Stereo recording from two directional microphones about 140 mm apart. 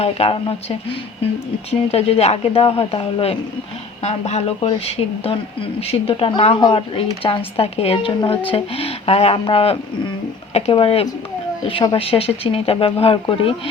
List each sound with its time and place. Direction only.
0.0 s speech: 45° left (ahead or behind)